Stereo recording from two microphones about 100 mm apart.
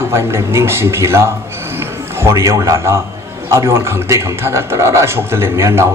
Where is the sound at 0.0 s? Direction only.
25° right (ahead or behind).